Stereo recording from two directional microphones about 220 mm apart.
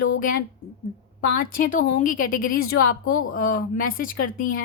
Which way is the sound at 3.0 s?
70° left (ahead or behind).